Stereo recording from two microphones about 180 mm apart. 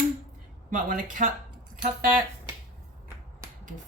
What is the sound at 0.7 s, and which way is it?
Speech, 45° right (ahead or behind).